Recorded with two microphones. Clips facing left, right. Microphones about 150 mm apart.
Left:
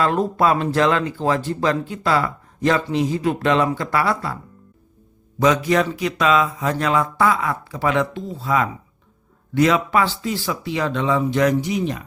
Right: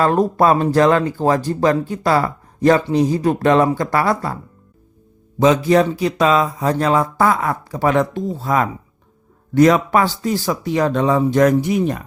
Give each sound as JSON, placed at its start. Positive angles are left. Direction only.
{"t": 0.0, "sound": "speech", "side_deg": -40}
{"t": 5.4, "sound": "speech", "side_deg": -30}